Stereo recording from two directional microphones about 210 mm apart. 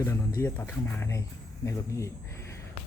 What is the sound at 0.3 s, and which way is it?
Speech, 10° left (ahead or behind).